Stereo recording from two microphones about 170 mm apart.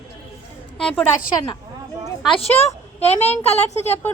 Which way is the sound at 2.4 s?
40° left (ahead or behind).